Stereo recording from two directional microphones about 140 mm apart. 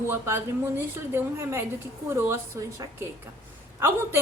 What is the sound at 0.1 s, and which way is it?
A woman's voice, 15° right (ahead or behind).